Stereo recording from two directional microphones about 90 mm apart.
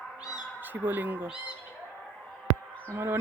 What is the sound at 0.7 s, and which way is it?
Speech, 20° right (ahead or behind).